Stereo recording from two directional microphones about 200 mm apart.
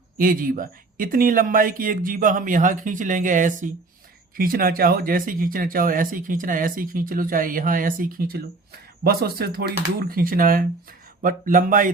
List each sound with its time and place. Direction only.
0.2 s speech: 45° right (ahead or behind)